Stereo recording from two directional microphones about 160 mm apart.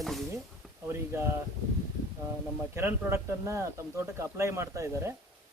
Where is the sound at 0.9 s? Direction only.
15° right (ahead or behind).